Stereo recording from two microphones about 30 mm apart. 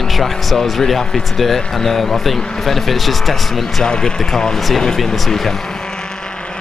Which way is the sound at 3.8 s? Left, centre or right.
Left.